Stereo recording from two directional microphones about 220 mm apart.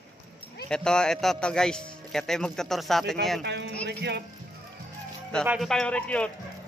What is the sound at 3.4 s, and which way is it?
Speech, 50° right (ahead or behind).